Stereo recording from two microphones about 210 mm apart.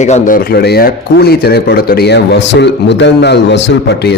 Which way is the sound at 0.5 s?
50° left (ahead or behind).